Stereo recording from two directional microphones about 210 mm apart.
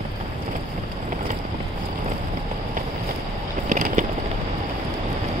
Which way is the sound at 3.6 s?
35° right (ahead or behind).